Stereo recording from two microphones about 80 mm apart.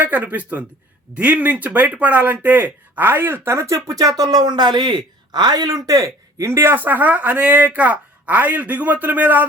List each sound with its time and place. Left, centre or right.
0.0 s speech: right